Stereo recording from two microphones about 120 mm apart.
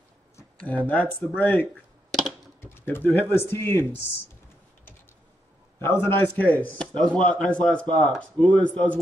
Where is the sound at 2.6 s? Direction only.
20° left (ahead or behind).